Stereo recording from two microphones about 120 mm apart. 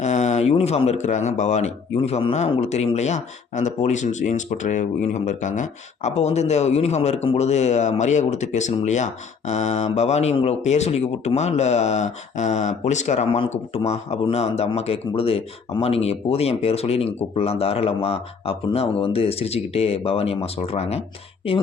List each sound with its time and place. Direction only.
0.0 s speech: 75° left (ahead or behind); by 21.0 s 60° left (ahead or behind)